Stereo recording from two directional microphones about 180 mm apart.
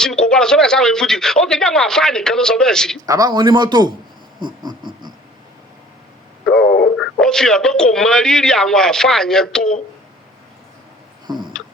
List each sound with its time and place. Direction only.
0.0 s speech: 5° left (ahead or behind)
3.1 s a man's voice: 20° right (ahead or behind)
4.4 s a sound: 25° right (ahead or behind)
6.9 s speech: centre (ahead or behind)
11.3 s a man's voice: 25° right (ahead or behind)